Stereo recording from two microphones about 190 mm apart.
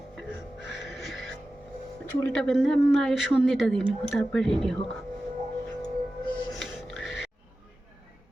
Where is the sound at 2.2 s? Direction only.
5° left (ahead or behind).